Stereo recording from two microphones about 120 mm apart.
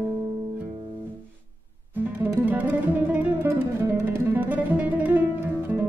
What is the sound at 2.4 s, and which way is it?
Music, 15° right (ahead or behind).